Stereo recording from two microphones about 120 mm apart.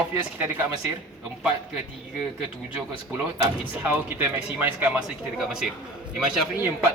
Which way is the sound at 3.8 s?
15° right (ahead or behind).